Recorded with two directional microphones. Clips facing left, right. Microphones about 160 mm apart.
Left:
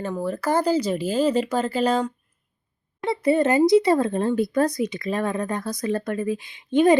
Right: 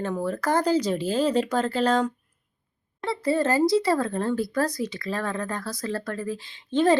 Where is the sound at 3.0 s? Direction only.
20° left (ahead or behind).